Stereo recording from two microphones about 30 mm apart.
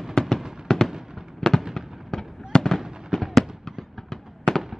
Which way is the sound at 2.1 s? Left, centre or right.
Centre.